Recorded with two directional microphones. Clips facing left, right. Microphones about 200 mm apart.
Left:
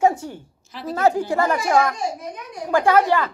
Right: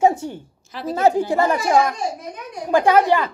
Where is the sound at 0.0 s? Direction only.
25° right (ahead or behind).